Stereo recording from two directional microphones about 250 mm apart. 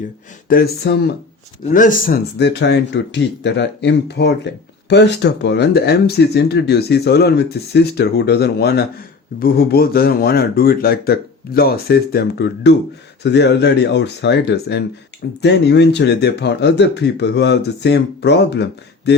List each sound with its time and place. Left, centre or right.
0.4 s a man's voice: left